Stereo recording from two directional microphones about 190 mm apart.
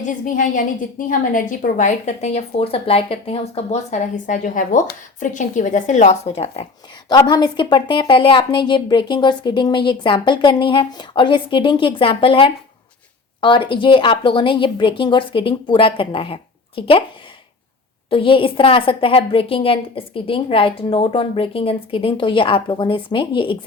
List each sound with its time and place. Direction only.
0.0 s a woman's voice: 40° left (ahead or behind)
7.1 s speech: 20° left (ahead or behind)
18.1 s speech: 25° left (ahead or behind)